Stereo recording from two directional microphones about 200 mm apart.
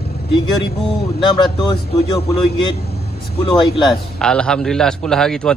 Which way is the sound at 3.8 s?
5° left (ahead or behind).